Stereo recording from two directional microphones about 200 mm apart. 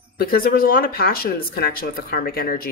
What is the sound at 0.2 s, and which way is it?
Speech, 45° left (ahead or behind).